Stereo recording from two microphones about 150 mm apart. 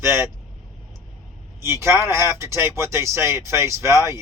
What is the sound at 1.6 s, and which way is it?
Speech, 20° right (ahead or behind).